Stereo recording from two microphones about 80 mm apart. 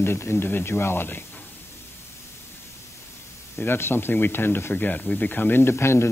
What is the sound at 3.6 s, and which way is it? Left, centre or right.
Speech, left.